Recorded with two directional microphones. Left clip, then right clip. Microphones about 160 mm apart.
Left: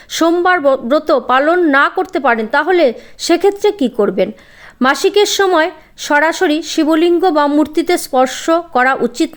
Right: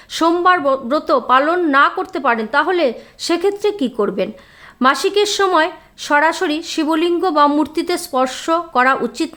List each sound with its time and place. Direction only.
0.1 s speech: 25° left (ahead or behind)